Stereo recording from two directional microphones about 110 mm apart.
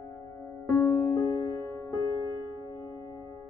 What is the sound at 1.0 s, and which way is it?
Music, 30° left (ahead or behind).